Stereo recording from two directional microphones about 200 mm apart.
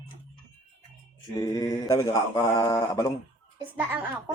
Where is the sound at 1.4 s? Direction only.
20° left (ahead or behind).